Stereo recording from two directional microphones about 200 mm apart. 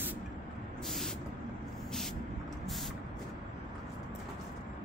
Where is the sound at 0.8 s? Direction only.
Centre (ahead or behind).